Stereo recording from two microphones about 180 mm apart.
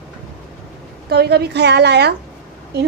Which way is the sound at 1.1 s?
65° right (ahead or behind).